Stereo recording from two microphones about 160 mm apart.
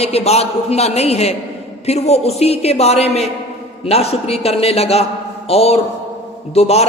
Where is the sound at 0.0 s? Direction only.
40° left (ahead or behind).